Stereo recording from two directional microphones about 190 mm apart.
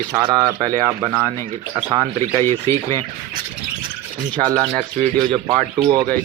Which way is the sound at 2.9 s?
25° right (ahead or behind).